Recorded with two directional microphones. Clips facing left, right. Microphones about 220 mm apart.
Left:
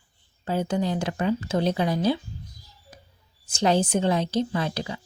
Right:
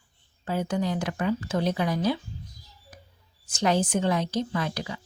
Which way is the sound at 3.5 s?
30° left (ahead or behind).